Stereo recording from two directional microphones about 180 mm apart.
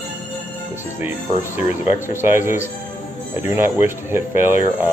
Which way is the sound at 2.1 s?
15° right (ahead or behind).